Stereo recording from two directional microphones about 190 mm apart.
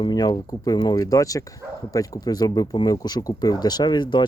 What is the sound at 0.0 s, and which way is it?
Speech, 20° left (ahead or behind).